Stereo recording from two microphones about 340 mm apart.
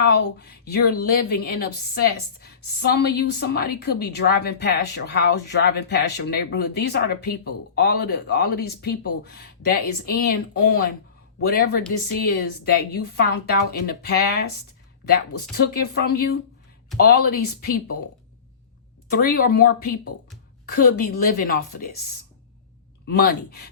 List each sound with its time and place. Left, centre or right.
0.0 s a woman's voice: left
15.5 s a woman's voice: left
19.0 s a woman's voice: left
23.0 s a woman's voice: left